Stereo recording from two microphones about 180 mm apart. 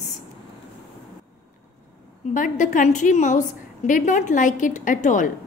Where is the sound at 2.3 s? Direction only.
45° left (ahead or behind).